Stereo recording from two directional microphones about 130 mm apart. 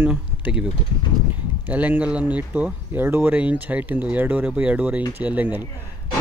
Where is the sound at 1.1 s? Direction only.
30° right (ahead or behind).